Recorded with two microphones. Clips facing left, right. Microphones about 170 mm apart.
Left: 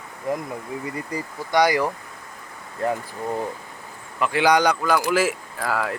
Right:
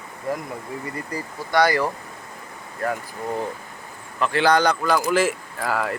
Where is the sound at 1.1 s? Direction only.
15° left (ahead or behind).